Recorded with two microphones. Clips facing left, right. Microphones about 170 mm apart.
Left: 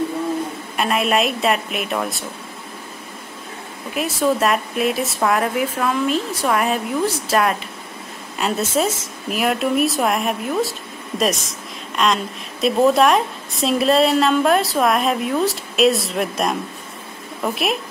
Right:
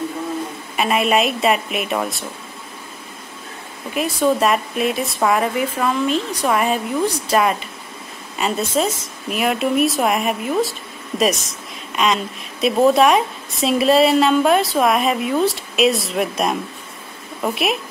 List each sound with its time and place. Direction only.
0.7 s speech: centre (ahead or behind)
3.9 s speech: centre (ahead or behind)